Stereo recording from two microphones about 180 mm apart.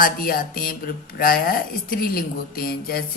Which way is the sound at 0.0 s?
50° left (ahead or behind).